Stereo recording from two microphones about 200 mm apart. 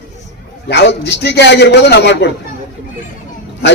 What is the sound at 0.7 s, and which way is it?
A man's voice, 60° left (ahead or behind).